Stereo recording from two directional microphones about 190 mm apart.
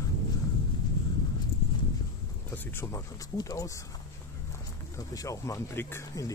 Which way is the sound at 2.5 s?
15° left (ahead or behind).